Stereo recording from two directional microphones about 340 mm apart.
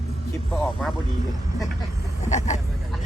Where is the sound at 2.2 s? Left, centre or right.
Centre.